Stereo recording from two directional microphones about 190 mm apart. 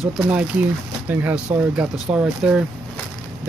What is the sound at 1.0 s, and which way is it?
Speech, 10° right (ahead or behind).